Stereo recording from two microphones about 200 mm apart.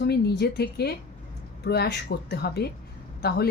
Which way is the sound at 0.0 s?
55° left (ahead or behind).